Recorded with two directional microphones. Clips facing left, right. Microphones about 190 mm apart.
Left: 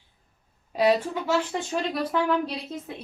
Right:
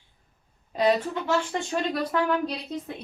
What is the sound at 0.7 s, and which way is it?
A woman's voice, 5° left (ahead or behind).